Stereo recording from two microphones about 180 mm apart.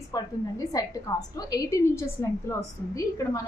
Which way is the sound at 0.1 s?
20° left (ahead or behind).